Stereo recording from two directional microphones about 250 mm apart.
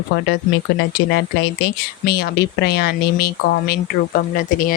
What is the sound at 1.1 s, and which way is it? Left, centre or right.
Speech, left.